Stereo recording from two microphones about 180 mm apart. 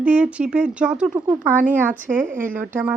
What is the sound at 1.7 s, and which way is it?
Speech, 10° right (ahead or behind).